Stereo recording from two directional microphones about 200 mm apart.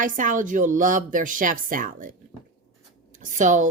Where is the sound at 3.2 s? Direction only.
40° right (ahead or behind).